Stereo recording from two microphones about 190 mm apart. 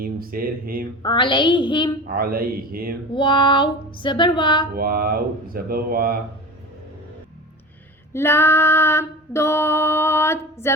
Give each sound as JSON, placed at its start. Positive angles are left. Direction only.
{"t": 0.0, "sound": "speech", "side_deg": -50}
{"t": 1.0, "sound": "speech", "side_deg": 25}
{"t": 2.1, "sound": "speech", "side_deg": -50}
{"t": 3.2, "sound": "speech", "side_deg": 25}
{"t": 4.7, "sound": "speech", "side_deg": -50}
{"t": 8.1, "sound": "female singing", "side_deg": 10}